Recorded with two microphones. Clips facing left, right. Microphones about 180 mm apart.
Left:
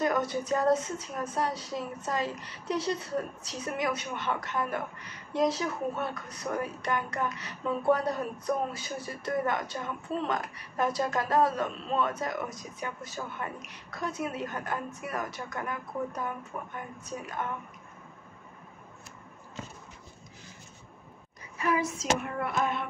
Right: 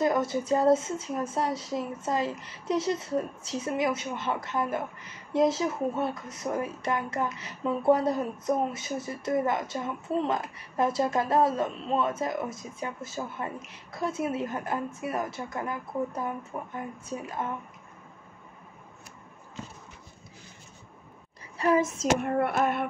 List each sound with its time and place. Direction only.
0.0 s speech: 25° right (ahead or behind)
21.5 s speech: 35° right (ahead or behind)
22.2 s child singing: 55° right (ahead or behind)